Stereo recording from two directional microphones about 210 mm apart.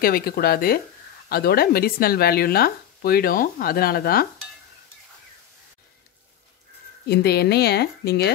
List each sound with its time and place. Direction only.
0.0 s speech: 45° left (ahead or behind)
7.1 s speech: 50° left (ahead or behind)